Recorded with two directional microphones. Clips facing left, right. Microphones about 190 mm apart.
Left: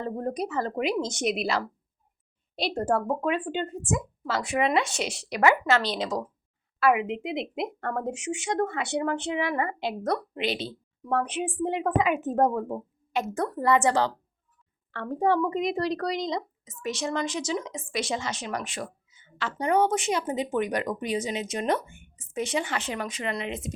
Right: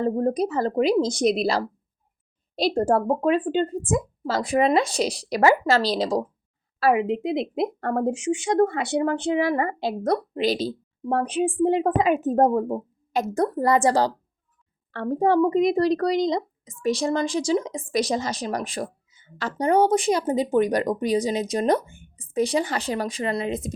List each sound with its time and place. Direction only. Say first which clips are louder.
0.0 s speech: right 8 dB; 35° right (ahead or behind)